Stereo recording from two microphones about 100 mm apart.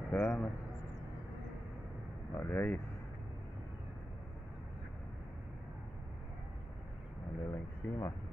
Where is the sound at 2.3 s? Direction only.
20° left (ahead or behind).